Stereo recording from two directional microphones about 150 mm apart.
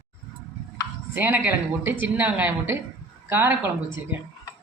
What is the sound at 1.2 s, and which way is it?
A woman's voice, 10° right (ahead or behind).